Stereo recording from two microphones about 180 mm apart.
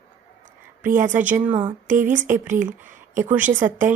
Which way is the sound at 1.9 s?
45° right (ahead or behind).